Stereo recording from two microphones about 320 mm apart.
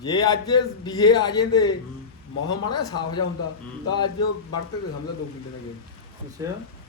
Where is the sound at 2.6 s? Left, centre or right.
Left.